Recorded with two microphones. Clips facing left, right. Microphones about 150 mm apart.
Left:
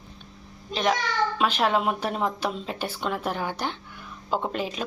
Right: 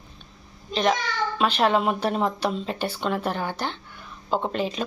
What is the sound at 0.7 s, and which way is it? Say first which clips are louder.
Speech: right 2 dB; 5° left (ahead or behind).